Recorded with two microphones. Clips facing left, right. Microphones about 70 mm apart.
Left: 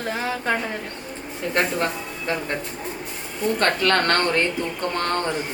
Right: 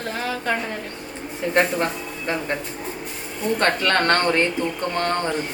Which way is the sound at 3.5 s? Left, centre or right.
Right.